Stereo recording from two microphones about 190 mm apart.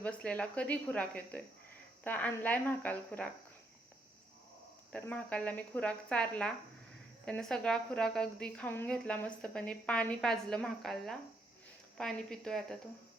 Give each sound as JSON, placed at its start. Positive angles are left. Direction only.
{"t": 0.0, "sound": "speech", "side_deg": 5}
{"t": 4.9, "sound": "a woman's voice", "side_deg": 10}